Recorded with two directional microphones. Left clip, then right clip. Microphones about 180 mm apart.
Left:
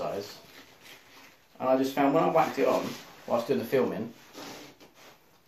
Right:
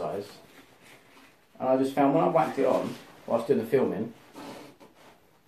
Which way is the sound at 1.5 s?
10° left (ahead or behind).